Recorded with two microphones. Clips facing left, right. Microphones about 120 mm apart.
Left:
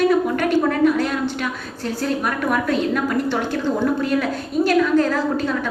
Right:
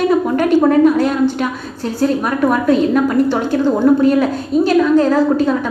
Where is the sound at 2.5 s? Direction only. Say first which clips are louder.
Right 7 dB; 35° right (ahead or behind).